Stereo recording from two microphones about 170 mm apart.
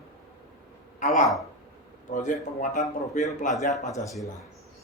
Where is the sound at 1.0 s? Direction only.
50° left (ahead or behind).